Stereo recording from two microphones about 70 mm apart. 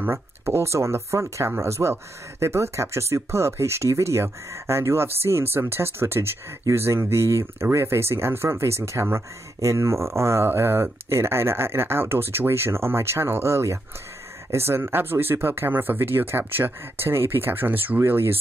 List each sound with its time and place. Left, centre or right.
0.0 s speech: right